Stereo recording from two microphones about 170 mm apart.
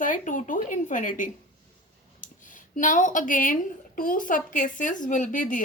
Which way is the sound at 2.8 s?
50° left (ahead or behind).